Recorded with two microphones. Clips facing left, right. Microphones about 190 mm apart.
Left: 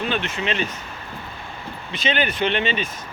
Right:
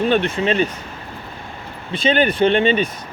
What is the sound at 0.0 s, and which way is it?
Speech, 45° right (ahead or behind).